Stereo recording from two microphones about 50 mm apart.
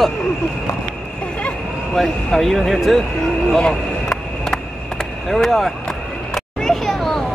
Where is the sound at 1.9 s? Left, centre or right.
Centre.